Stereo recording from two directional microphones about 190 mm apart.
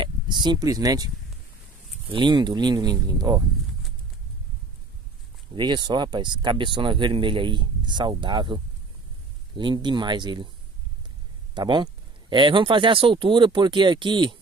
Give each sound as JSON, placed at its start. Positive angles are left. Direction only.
{"t": 0.0, "sound": "speech", "side_deg": -25}
{"t": 5.6, "sound": "speech", "side_deg": -25}
{"t": 9.6, "sound": "speech", "side_deg": -25}
{"t": 11.5, "sound": "speech", "side_deg": -25}